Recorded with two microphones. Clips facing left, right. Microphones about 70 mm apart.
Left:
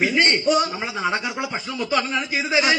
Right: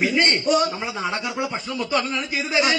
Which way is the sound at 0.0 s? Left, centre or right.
Left.